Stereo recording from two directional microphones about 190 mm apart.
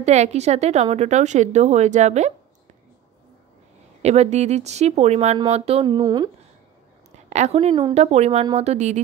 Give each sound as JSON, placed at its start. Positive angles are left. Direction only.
{"t": 0.0, "sound": "a woman's voice", "side_deg": -35}
{"t": 4.0, "sound": "a woman's voice", "side_deg": -35}
{"t": 7.2, "sound": "a woman's voice", "side_deg": -35}